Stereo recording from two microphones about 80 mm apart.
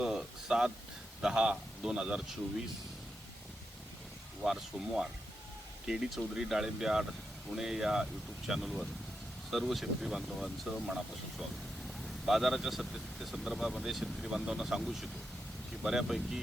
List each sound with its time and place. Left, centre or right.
0.0 s a sound: centre
1.2 s speech: centre
5.9 s speech: centre
12.0 s speech: centre